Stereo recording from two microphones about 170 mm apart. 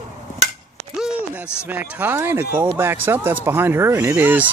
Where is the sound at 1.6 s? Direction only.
10° right (ahead or behind).